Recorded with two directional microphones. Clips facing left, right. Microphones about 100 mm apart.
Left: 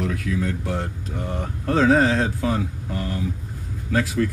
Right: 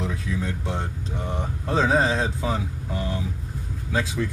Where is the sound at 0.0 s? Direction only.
25° right (ahead or behind).